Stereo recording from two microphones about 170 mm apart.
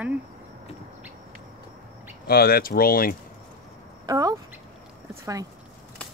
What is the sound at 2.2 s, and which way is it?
Speech, 65° left (ahead or behind).